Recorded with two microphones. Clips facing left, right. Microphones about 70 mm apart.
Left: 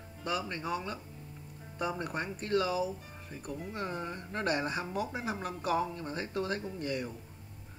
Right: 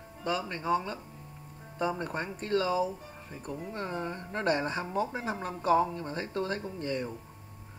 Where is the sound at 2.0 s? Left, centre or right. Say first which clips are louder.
Right 2 dB; centre.